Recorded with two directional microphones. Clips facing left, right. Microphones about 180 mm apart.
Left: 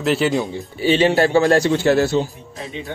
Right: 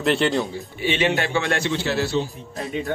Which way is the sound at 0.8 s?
35° left (ahead or behind).